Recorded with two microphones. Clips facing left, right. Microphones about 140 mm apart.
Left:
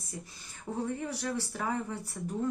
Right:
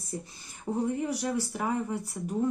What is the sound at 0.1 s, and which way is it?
Speech, 30° right (ahead or behind).